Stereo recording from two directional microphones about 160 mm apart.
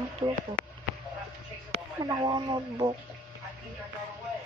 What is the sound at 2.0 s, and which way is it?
Speech, 25° right (ahead or behind).